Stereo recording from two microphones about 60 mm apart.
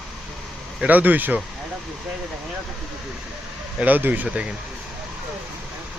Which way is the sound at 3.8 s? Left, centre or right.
Right.